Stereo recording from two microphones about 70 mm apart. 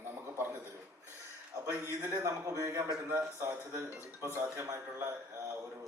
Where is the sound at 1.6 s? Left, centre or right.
Right.